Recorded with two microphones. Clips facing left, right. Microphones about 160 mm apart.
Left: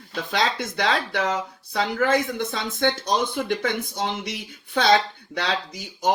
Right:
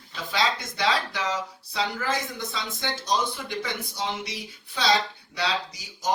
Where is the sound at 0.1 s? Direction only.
50° left (ahead or behind).